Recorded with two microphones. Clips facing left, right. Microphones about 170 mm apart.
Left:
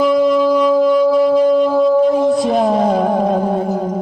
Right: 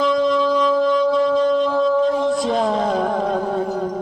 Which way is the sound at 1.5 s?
15° left (ahead or behind).